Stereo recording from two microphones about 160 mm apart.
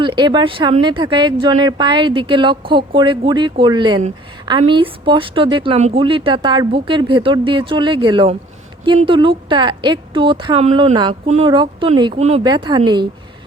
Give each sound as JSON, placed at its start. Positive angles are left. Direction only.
{"t": 0.0, "sound": "speech", "side_deg": -30}